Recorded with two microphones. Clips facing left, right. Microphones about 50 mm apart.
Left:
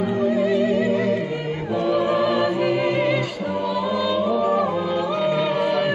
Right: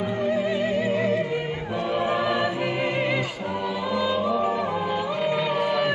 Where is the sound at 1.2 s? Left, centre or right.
Centre.